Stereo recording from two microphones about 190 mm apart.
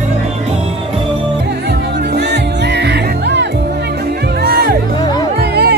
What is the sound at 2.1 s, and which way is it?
Music, 65° right (ahead or behind).